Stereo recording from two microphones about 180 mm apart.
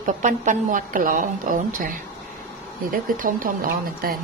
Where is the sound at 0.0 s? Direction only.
45° right (ahead or behind).